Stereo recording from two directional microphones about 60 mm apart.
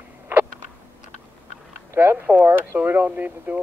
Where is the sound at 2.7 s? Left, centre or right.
Right.